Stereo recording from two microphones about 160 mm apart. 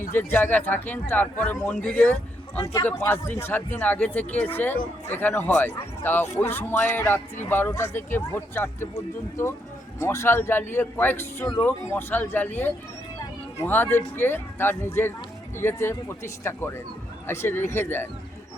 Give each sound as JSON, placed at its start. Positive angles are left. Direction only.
{"t": 0.1, "sound": "a man's voice", "side_deg": 10}
{"t": 6.2, "sound": "speech", "side_deg": 45}
{"t": 6.5, "sound": "a man's voice", "side_deg": 15}
{"t": 10.0, "sound": "a man's voice", "side_deg": 15}